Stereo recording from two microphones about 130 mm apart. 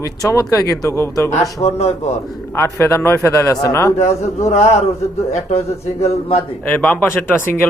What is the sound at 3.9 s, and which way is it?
Speech, 55° left (ahead or behind).